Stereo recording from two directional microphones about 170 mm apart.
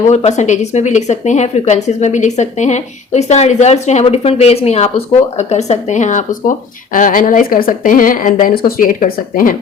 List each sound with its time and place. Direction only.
0.1 s speech: 40° left (ahead or behind)